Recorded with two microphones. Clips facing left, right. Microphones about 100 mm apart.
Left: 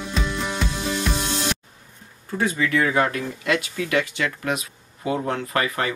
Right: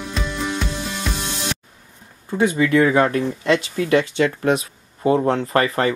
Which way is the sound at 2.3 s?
20° right (ahead or behind).